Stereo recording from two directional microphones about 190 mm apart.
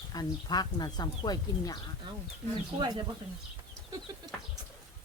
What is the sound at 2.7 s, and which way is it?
Speech, 25° right (ahead or behind).